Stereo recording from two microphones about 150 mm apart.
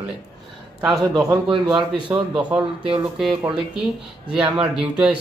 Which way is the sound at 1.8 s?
30° right (ahead or behind).